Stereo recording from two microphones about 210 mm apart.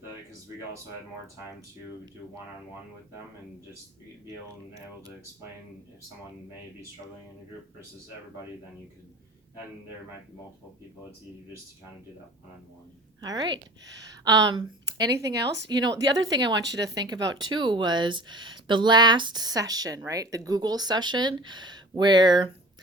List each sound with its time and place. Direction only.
13.2 s speech: 20° right (ahead or behind)